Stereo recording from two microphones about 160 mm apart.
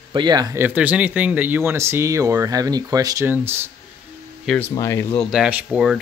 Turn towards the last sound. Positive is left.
turn(degrees=-5)  # may be behind; listen again after turning